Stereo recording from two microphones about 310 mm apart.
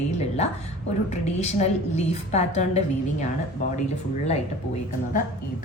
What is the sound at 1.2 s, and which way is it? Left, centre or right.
A woman's voice, left.